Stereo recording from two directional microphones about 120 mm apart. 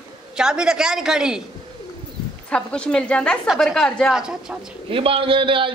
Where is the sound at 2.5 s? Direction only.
10° left (ahead or behind).